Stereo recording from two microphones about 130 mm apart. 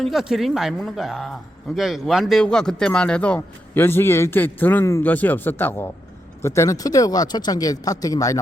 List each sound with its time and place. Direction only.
0.0 s speech: centre (ahead or behind); by 8.4 s 25° left (ahead or behind)